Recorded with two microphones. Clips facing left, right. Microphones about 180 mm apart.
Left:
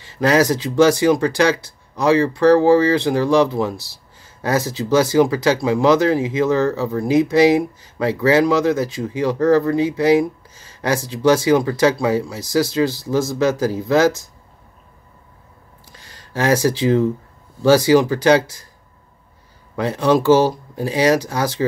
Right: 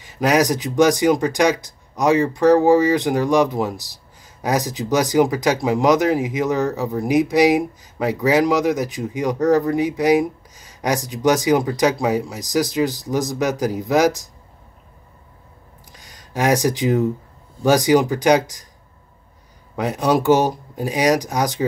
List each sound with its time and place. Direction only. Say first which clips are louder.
0.0 s speech: left 2 dB; 15° right (ahead or behind)
16.0 s speech: even; 15° right (ahead or behind)
19.8 s speech: left 2 dB; 15° right (ahead or behind)